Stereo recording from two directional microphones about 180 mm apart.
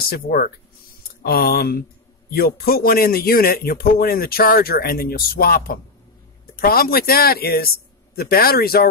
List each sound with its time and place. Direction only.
0.1 s a man's voice: 55° left (ahead or behind)